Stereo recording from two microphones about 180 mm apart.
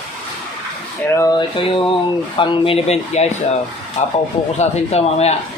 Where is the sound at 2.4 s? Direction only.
30° left (ahead or behind).